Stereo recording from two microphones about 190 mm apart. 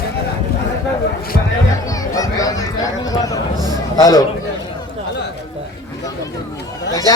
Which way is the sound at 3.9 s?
20° left (ahead or behind).